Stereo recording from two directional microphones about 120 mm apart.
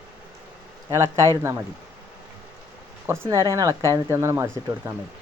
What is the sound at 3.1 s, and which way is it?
Speech, 25° right (ahead or behind).